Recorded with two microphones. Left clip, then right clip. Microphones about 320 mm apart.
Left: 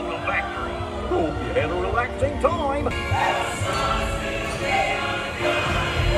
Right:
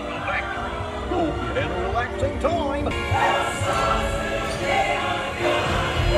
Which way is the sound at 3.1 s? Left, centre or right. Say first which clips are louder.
Right 2 dB; centre.